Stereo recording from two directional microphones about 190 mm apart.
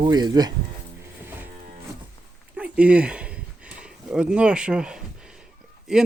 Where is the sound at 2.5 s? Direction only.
5° right (ahead or behind).